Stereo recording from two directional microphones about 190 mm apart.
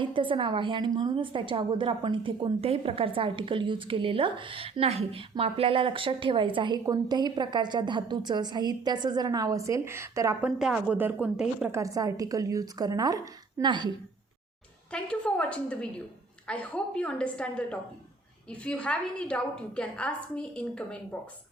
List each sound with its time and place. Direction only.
0.0 s a woman's voice: 25° right (ahead or behind); by 11.8 s 5° right (ahead or behind)
11.8 s a woman's voice: 20° right (ahead or behind)
14.9 s a woman's voice: 5° left (ahead or behind)